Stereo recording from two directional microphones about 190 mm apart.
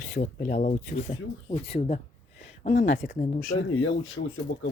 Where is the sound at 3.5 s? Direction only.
90° left.